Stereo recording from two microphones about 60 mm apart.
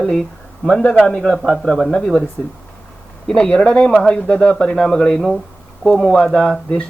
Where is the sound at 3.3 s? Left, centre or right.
Centre.